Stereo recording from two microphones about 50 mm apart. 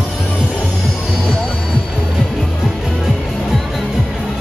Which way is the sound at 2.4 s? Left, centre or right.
Centre.